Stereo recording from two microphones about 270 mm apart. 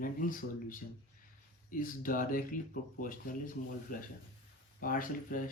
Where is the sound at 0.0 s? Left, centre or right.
Left.